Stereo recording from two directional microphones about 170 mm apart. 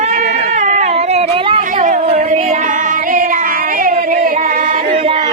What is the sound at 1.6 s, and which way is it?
Female singing, 50° right (ahead or behind).